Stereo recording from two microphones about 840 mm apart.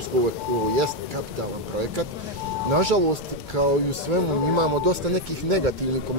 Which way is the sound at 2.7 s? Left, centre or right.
Right.